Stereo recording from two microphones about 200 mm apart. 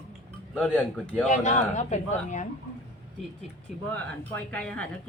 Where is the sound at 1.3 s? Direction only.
35° left (ahead or behind).